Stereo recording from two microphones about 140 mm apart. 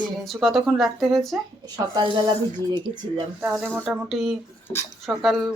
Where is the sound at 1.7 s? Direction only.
30° right (ahead or behind).